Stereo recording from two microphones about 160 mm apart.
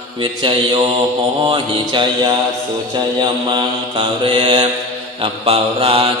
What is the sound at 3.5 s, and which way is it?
Mantra, 30° right (ahead or behind).